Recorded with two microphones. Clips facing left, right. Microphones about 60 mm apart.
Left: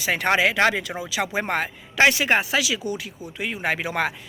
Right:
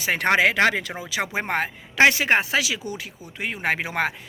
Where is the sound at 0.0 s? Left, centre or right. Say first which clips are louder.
Right 1 dB; right.